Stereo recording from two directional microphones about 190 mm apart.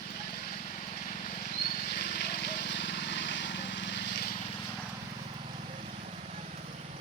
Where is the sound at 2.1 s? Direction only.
60° left (ahead or behind).